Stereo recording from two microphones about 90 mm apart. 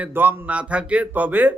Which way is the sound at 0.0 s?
20° right (ahead or behind).